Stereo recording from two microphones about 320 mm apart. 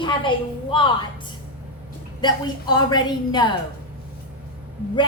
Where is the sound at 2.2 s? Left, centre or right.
Centre.